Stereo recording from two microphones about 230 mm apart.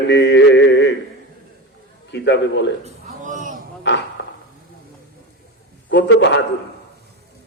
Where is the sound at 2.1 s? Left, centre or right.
Left.